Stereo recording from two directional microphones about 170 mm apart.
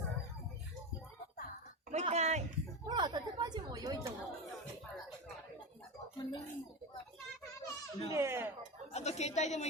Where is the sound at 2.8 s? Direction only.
25° right (ahead or behind).